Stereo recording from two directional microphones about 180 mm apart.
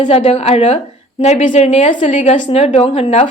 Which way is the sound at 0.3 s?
35° left (ahead or behind).